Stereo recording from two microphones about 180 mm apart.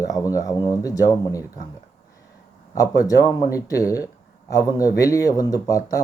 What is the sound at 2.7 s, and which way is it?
Speech, 20° left (ahead or behind).